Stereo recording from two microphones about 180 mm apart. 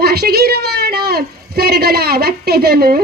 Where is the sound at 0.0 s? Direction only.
60° right (ahead or behind).